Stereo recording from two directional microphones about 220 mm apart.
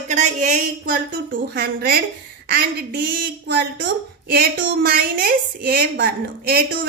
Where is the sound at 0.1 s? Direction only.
35° right (ahead or behind).